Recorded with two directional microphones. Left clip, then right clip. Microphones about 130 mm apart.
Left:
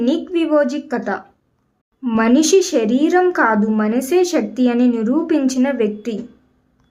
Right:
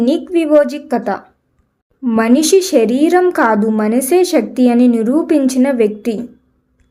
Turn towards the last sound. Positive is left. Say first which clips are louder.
# right 5 dB
turn(degrees=-30)  # may be behind; listen again after turning